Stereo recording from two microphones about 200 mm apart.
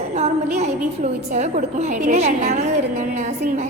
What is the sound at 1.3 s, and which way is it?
A woman's voice, 35° right (ahead or behind).